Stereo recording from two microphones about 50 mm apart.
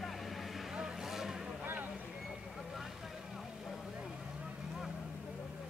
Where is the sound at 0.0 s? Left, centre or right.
Centre.